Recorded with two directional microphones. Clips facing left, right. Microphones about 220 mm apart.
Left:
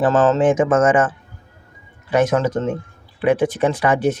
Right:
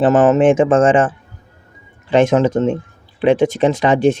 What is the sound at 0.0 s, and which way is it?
Speech, 20° right (ahead or behind).